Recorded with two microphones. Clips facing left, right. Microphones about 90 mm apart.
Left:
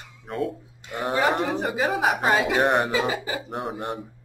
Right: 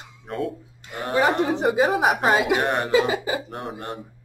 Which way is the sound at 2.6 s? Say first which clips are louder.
Left 3 dB; 15° left (ahead or behind).